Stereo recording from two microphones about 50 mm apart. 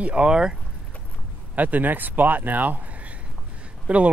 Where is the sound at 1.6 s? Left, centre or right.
Right.